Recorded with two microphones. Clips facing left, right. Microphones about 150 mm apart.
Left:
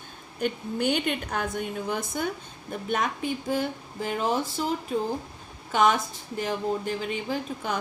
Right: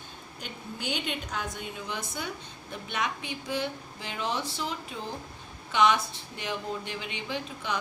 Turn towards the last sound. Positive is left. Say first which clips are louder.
# left 4 dB
turn(degrees=45)  # may be behind; listen again after turning